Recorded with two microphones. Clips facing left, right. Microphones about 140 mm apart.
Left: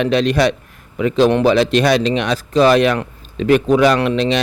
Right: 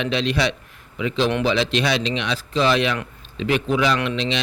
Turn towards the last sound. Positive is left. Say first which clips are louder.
# left 7 dB
turn(degrees=45)  # may be behind; listen again after turning